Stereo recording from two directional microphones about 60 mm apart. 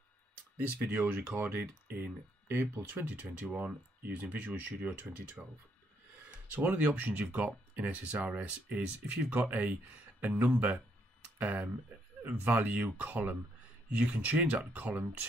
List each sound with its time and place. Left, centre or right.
0.6 s speech: right
2.4 s speech: right
3.0 s speech: right